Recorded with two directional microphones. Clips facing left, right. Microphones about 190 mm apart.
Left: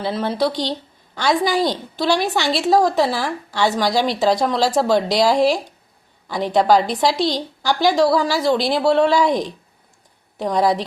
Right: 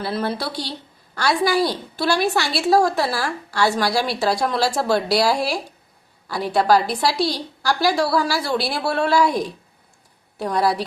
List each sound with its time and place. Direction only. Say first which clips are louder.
0.1 s a woman's voice: left 6 dB; 15° left (ahead or behind)